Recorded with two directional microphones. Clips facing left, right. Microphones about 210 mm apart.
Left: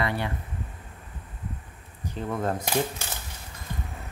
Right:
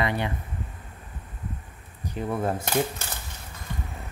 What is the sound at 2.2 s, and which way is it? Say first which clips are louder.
Speech: right 1 dB; 10° right (ahead or behind).